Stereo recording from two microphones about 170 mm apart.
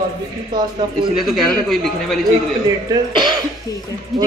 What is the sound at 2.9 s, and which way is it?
Speech, 25° right (ahead or behind).